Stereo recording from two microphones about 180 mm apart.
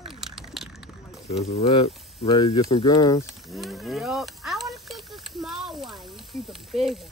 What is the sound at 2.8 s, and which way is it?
Speech, 20° left (ahead or behind).